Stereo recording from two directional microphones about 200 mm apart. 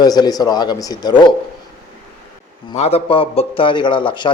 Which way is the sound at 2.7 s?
30° left (ahead or behind).